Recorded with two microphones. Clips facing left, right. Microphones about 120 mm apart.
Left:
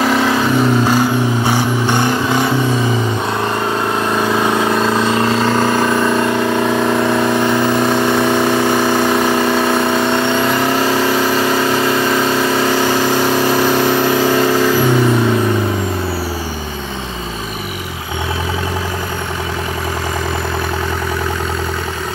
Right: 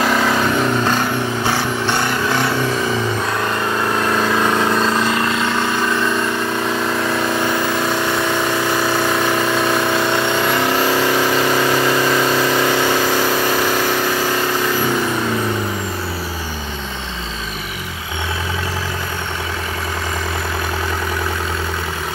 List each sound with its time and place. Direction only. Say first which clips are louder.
0.0 s vehicle: left 2 dB; 5° left (ahead or behind)
4.0 s vehicle: left 1 dB; 15° left (ahead or behind)
5.0 s vehicle: left 4 dB; 30° left (ahead or behind)